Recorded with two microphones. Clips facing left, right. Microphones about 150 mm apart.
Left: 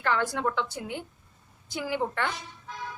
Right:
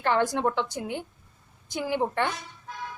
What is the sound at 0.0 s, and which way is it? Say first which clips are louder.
A woman's voice: right 3 dB; 20° right (ahead or behind).